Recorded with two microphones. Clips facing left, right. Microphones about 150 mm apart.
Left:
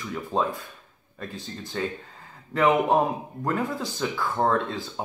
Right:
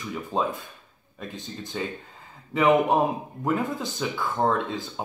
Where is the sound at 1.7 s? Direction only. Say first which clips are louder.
Left 2 dB; 5° right (ahead or behind).